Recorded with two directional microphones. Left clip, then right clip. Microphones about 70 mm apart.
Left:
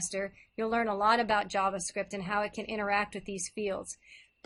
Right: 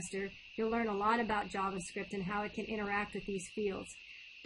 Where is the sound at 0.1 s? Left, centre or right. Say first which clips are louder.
Left 5 dB; left.